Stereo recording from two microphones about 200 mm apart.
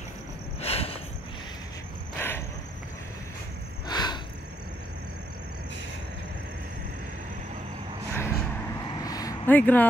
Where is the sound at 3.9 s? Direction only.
20° left (ahead or behind).